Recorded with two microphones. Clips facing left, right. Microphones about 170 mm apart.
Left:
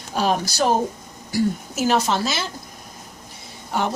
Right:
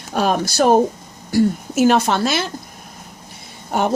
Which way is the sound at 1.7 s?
55° right (ahead or behind).